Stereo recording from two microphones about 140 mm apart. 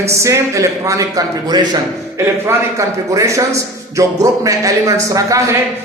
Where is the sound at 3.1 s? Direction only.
25° right (ahead or behind).